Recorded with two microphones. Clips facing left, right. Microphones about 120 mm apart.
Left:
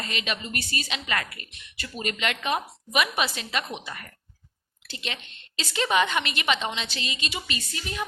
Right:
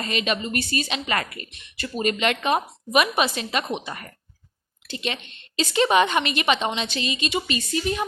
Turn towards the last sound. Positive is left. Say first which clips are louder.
# right 10 dB
turn(degrees=-25)  # may be behind; listen again after turning